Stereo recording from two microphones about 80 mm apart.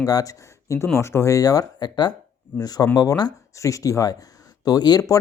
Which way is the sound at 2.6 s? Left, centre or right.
Left.